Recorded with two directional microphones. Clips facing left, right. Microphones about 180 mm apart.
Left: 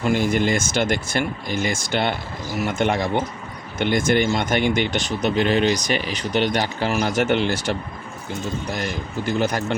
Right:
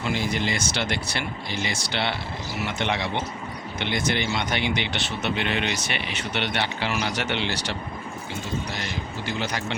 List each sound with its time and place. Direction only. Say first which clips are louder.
0.0 s speech: left 7 dB; 50° left (ahead or behind)